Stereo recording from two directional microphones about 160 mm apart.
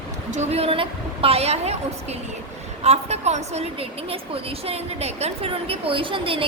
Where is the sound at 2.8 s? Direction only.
45° right (ahead or behind).